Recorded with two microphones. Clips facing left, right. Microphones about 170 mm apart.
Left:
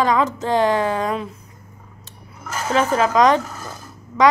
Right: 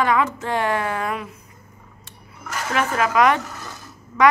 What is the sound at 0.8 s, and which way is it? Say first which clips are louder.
Speech: left 4 dB; 25° left (ahead or behind).